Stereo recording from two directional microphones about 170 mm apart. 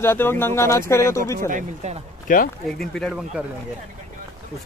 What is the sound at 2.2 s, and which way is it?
Speech, 55° left (ahead or behind).